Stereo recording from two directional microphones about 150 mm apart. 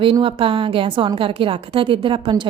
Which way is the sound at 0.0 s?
35° right (ahead or behind).